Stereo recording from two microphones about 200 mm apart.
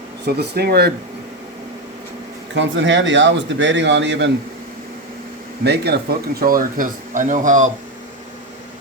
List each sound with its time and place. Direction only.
0.3 s speech: 55° right (ahead or behind)
2.6 s a man's voice: 65° right (ahead or behind)
5.6 s speech: 55° right (ahead or behind); by 7.7 s 40° right (ahead or behind)